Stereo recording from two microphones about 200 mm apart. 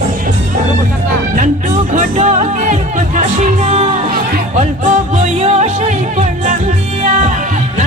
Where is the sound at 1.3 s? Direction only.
40° right (ahead or behind).